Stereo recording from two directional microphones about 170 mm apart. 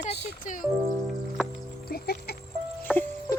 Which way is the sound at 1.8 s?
65° left (ahead or behind).